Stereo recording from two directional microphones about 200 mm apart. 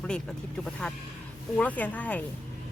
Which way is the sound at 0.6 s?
5° left (ahead or behind).